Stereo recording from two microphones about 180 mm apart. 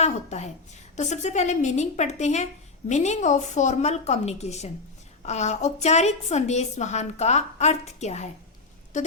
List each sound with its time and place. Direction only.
0.0 s a woman's voice: 40° left (ahead or behind)